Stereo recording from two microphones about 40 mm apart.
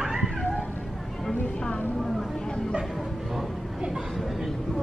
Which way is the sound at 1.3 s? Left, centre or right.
Left.